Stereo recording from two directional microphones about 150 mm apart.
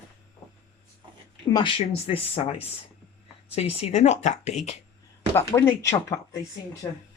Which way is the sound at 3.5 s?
40° left (ahead or behind).